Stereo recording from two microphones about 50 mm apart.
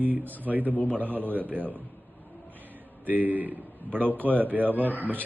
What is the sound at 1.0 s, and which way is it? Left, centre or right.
Speech, right.